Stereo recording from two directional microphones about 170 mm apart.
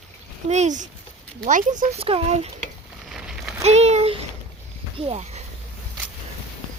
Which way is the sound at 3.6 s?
40° right (ahead or behind).